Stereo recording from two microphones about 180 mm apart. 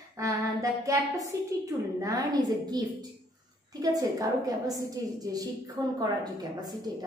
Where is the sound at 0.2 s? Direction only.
20° right (ahead or behind).